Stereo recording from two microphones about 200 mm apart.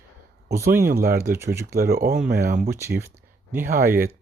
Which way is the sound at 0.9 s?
50° right (ahead or behind).